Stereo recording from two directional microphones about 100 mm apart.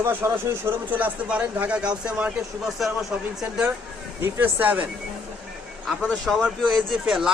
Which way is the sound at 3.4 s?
10° right (ahead or behind).